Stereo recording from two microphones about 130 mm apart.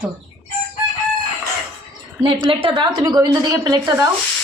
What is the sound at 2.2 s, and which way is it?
A woman's voice, 40° right (ahead or behind).